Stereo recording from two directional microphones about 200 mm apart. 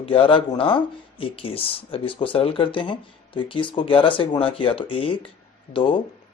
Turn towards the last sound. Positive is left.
turn(degrees=25)  # may be behind; listen again after turning